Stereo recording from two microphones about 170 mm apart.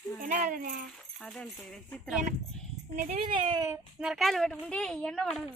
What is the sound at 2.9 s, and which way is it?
Speech, 50° right (ahead or behind).